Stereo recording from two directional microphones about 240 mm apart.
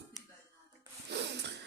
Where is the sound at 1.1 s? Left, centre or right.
Right.